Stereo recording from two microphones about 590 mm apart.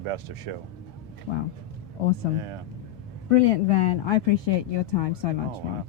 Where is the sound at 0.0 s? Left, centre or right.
Right.